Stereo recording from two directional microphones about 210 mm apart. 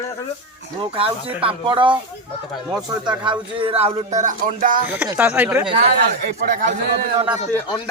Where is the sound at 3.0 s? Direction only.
25° right (ahead or behind); by 4.8 s 40° right (ahead or behind).